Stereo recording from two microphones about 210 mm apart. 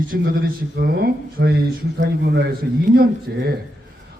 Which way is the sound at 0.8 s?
50° right (ahead or behind).